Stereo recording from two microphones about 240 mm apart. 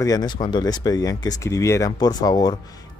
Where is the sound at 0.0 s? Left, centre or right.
Centre.